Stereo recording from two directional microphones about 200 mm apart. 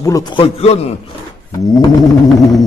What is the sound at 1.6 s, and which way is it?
Speech, 15° left (ahead or behind).